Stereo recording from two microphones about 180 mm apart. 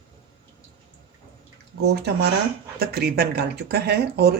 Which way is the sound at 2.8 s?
65° right (ahead or behind).